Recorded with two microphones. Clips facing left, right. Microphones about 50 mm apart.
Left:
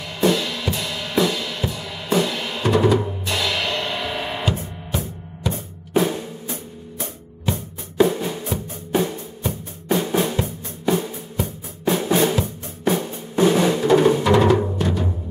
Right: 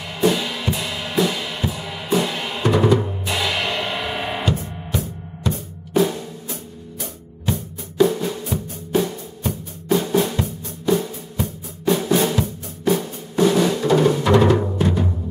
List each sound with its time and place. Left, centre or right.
0.2 s music: centre
4.5 s music: centre
5.9 s drum: centre
8.0 s music: left
9.8 s drum: centre
14.2 s music: centre